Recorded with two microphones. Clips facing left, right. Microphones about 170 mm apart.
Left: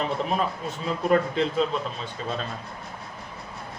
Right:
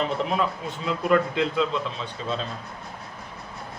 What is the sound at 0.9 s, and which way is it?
Speech, 40° left (ahead or behind).